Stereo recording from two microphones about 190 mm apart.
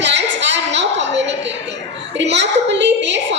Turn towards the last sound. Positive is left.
turn(degrees=-70)  # may be behind; listen again after turning